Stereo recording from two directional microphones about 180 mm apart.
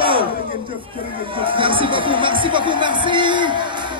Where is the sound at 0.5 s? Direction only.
30° right (ahead or behind).